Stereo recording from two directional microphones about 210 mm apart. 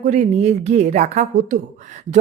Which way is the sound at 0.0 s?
35° right (ahead or behind).